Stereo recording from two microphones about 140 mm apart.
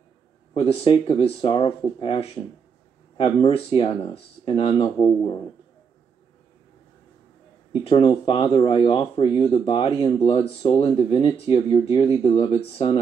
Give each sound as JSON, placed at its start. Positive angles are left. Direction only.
{"t": 0.6, "sound": "a man's voice", "side_deg": 40}
{"t": 7.8, "sound": "speech", "side_deg": 35}